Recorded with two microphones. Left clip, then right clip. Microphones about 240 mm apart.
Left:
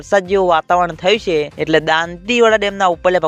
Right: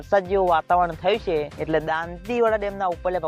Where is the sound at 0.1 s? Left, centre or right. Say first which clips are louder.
Left 6 dB; left.